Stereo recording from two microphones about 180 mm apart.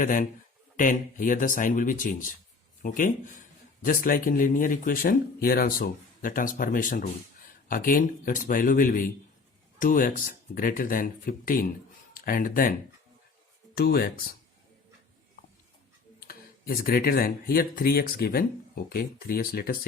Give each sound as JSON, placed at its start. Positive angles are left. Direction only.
{"t": 0.0, "sound": "speech", "side_deg": 50}
{"t": 13.7, "sound": "speech", "side_deg": 55}
{"t": 16.2, "sound": "speech", "side_deg": 55}